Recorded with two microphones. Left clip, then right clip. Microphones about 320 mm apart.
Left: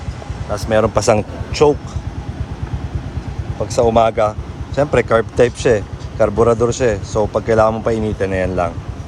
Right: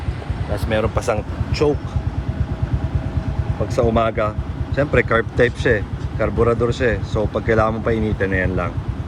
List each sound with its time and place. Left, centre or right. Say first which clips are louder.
0.5 s speech: left 6 dB; left
3.8 s speech: left 5 dB; centre